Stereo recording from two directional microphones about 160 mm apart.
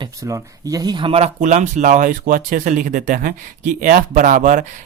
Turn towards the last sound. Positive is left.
turn(degrees=-55)  # may be behind; listen again after turning